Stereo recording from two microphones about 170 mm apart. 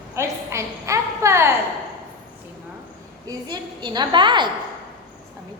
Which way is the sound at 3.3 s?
25° right (ahead or behind).